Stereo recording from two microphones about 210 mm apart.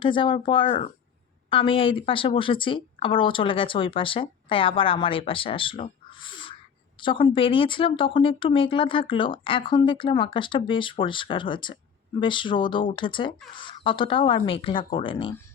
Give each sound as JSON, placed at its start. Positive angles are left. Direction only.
{"t": 0.0, "sound": "speech", "side_deg": 25}